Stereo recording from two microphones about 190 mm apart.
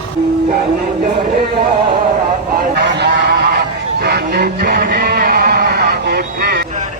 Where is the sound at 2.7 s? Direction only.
60° right (ahead or behind).